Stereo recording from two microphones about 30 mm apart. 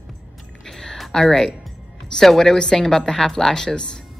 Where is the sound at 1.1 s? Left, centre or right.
Centre.